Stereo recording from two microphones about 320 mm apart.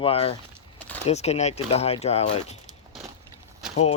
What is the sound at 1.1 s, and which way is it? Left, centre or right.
Speech, centre.